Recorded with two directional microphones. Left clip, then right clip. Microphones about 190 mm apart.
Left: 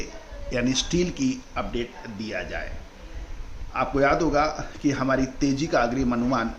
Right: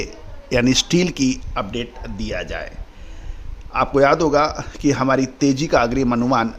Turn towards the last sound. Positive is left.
turn(degrees=-65)  # may be behind; listen again after turning